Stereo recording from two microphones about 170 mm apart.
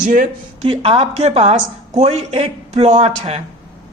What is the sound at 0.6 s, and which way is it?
A woman's voice, 35° right (ahead or behind).